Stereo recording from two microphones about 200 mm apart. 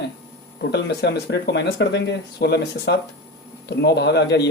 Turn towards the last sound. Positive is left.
turn(degrees=55)  # may be behind; listen again after turning